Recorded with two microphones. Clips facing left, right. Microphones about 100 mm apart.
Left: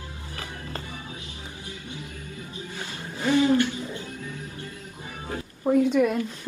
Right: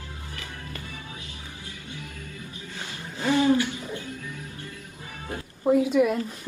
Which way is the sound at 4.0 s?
25° left (ahead or behind).